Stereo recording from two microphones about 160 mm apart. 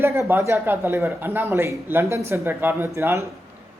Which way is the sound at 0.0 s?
15° right (ahead or behind).